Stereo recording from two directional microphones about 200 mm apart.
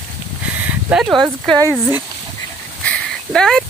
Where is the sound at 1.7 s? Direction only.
20° left (ahead or behind).